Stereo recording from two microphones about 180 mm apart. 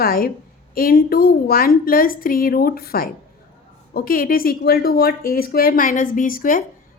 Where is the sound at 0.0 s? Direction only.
55° left (ahead or behind).